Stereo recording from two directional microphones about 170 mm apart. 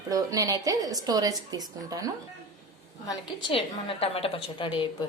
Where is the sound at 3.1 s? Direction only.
30° left (ahead or behind).